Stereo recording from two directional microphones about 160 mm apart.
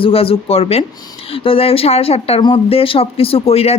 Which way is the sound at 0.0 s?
35° left (ahead or behind).